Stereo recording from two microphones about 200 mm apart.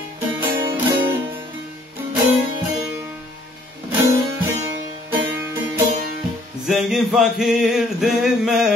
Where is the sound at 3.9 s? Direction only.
15° right (ahead or behind).